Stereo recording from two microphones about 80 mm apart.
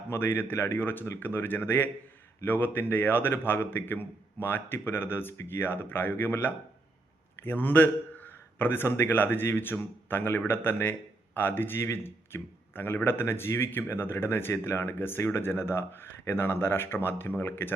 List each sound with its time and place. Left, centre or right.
0.1 s a man's voice: left